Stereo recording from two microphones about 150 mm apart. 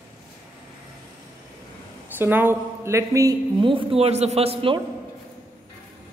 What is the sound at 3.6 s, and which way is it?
A man's voice, 35° right (ahead or behind).